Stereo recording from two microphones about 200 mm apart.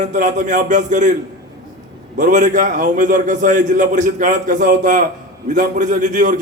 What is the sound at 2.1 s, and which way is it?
A man's voice, 40° right (ahead or behind).